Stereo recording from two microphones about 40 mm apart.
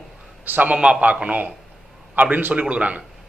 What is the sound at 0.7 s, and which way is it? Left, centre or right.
Speech, right.